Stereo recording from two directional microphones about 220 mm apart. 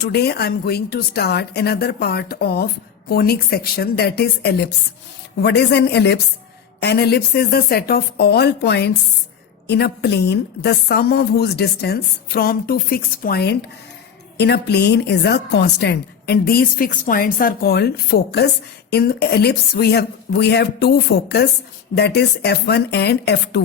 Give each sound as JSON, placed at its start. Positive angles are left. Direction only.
{"t": 0.0, "sound": "a woman's voice", "side_deg": 45}